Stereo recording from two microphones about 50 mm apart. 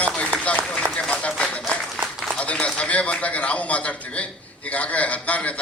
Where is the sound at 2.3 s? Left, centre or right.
Left.